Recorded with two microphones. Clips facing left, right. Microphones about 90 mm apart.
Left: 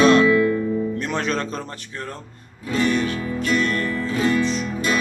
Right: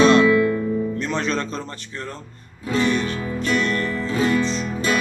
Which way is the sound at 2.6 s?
20° right (ahead or behind).